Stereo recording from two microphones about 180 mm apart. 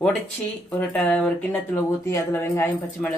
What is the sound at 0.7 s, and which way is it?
Speech, 10° left (ahead or behind).